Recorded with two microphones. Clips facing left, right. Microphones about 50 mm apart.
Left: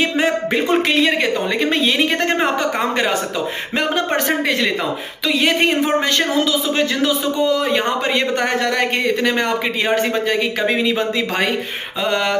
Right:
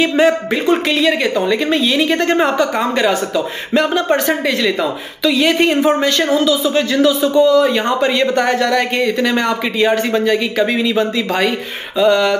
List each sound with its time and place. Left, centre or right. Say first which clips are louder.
0.9 s a man's voice: right 2 dB; left
1.7 s a woman's voice: right 2 dB; left
3.7 s a man's voice: right 5 dB; left
12.0 s a man's voice: right 7 dB; left